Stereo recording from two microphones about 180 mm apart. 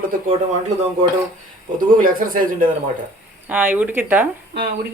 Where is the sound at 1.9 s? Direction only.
50° right (ahead or behind).